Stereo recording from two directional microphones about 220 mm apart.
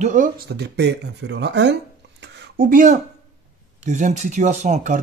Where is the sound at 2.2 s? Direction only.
50° right (ahead or behind).